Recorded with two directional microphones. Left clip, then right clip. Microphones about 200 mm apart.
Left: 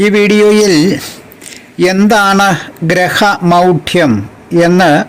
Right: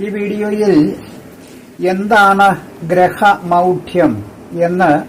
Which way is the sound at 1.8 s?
45° left (ahead or behind).